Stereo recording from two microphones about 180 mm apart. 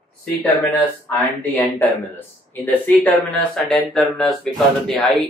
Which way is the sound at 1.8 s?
10° left (ahead or behind).